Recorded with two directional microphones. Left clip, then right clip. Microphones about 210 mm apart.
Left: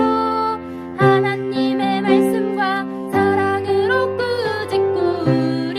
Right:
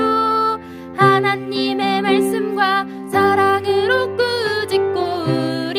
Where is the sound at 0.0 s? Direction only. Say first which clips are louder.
Right 2 dB; 55° right (ahead or behind).